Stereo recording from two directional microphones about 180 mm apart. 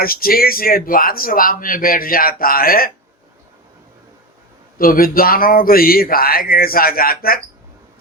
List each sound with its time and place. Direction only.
0.0 s speech: 55° left (ahead or behind)
4.8 s speech: 55° left (ahead or behind)